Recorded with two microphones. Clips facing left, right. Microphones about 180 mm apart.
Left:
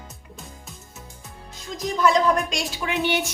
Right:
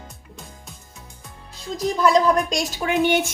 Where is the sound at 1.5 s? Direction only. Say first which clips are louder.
Right 4 dB; 35° right (ahead or behind).